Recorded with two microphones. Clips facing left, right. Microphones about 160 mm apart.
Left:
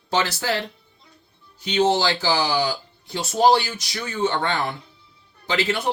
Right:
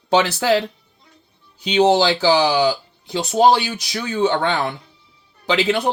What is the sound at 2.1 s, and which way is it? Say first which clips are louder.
Speech: right 6 dB; 70° right (ahead or behind).